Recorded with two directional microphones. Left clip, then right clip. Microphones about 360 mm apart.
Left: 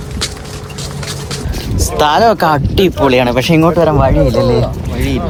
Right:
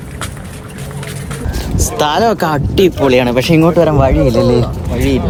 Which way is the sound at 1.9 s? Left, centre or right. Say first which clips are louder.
Left 3 dB; centre.